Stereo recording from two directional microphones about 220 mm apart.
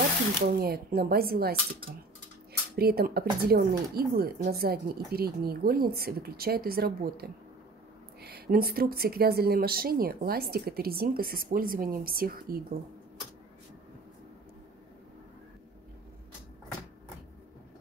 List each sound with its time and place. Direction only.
0.5 s speech: 45° right (ahead or behind)